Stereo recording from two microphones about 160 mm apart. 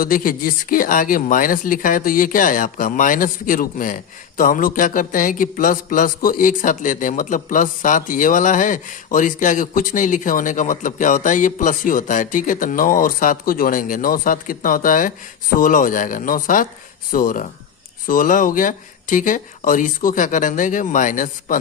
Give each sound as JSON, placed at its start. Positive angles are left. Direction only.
{"t": 0.0, "sound": "speech", "side_deg": 60}